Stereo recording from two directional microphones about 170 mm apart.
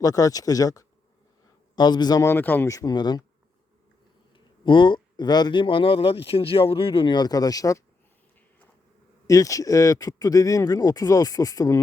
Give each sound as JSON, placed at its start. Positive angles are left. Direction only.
{"t": 0.0, "sound": "speech", "side_deg": 20}
{"t": 4.6, "sound": "speech", "side_deg": 30}
{"t": 9.2, "sound": "speech", "side_deg": 20}